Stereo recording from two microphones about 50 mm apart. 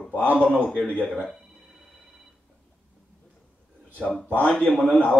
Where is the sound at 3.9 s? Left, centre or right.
Left.